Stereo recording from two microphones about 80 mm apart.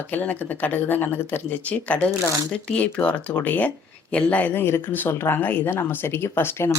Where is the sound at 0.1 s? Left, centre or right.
Left.